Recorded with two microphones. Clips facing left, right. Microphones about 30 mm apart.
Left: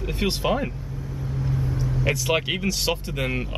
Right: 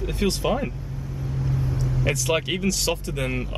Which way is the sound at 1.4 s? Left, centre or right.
Centre.